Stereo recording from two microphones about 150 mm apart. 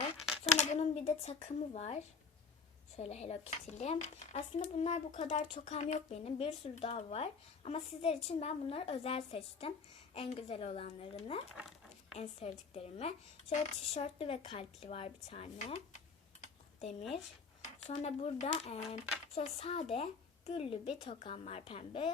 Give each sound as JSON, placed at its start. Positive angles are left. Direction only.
{"t": 0.6, "sound": "speech", "side_deg": 45}
{"t": 17.6, "sound": "speech", "side_deg": 45}